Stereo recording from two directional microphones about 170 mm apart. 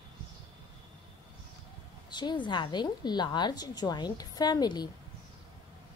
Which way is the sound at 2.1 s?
25° left (ahead or behind).